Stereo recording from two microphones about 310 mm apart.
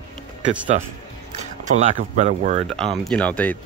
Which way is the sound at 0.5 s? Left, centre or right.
Right.